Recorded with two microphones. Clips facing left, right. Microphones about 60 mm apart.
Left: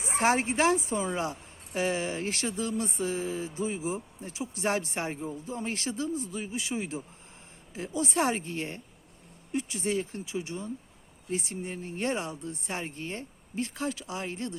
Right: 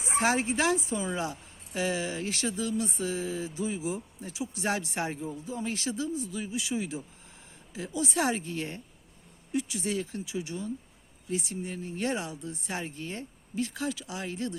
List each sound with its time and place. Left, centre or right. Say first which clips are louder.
0.0 s speech: left 1 dB; left